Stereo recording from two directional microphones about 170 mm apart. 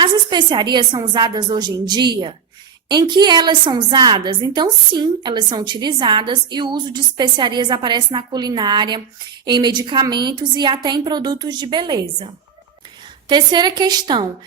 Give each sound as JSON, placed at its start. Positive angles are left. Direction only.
{"t": 0.0, "sound": "a woman's voice", "side_deg": -25}
{"t": 13.2, "sound": "a woman's voice", "side_deg": -25}